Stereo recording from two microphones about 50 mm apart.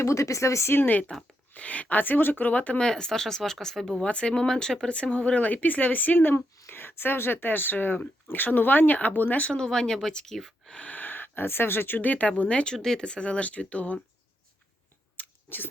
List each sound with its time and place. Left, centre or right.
0.0 s speech: left
0.7 s speech: left
1.5 s speech: left
2.8 s speech: centre
4.0 s speech: left
4.9 s speech: left
9.6 s speech: centre
10.8 s speech: left
12.7 s speech: centre; by 14.0 s left
15.1 s a sound: left